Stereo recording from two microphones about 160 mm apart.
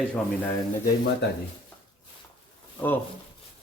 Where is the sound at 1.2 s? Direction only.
90° left.